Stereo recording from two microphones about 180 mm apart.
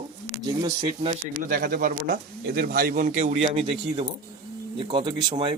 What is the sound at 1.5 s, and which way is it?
Speech, 50° right (ahead or behind).